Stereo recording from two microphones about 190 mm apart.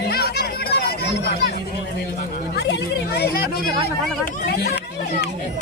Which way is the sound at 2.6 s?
60° left (ahead or behind).